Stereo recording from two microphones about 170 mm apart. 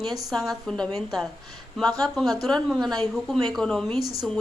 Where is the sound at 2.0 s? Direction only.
Centre (ahead or behind).